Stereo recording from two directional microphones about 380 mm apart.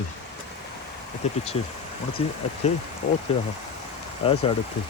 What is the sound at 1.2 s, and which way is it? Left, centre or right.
Speech, centre.